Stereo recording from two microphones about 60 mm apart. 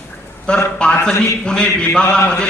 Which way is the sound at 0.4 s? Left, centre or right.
Centre.